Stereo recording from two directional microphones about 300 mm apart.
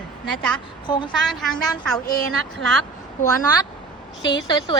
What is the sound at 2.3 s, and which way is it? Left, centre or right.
Speech, right.